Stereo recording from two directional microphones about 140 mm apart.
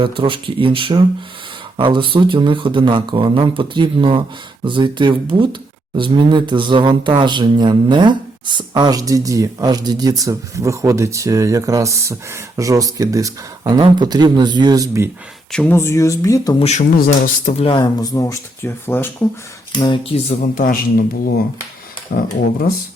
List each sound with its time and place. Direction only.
0.0 s speech: 40° right (ahead or behind)
15.5 s speech: 10° left (ahead or behind)
16.6 s speech: 50° left (ahead or behind)
17.7 s speech: 30° left (ahead or behind)
19.8 s speech: 40° left (ahead or behind)
20.6 s speech: 85° left